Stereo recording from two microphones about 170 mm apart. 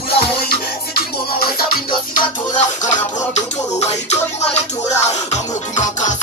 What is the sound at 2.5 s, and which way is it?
Music, 40° left (ahead or behind).